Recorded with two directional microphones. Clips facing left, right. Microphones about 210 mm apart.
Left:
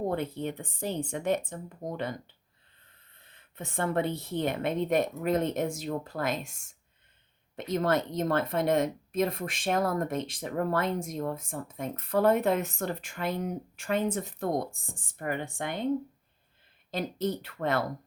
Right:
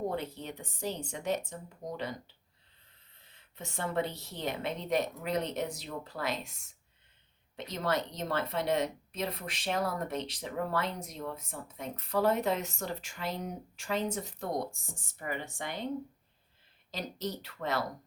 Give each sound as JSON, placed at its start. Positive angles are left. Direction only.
{"t": 0.2, "sound": "a woman's voice", "side_deg": 55}
{"t": 3.2, "sound": "a woman's voice", "side_deg": 55}
{"t": 16.9, "sound": "speech", "side_deg": 55}